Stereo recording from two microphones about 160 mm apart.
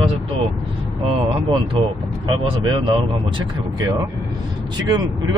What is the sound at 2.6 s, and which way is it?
Speech, 30° right (ahead or behind).